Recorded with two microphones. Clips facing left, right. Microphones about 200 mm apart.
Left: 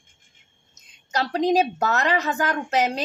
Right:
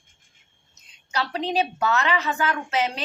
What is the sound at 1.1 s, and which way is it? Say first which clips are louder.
A woman's voice: left 6 dB; 45° left (ahead or behind).